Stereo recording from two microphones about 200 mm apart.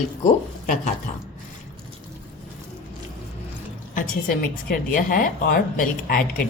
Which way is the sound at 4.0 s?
45° left (ahead or behind).